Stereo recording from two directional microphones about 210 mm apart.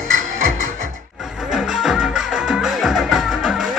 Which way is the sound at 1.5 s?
Centre (ahead or behind).